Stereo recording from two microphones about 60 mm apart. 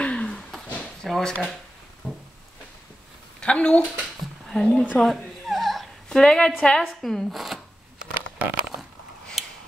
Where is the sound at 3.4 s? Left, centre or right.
Centre.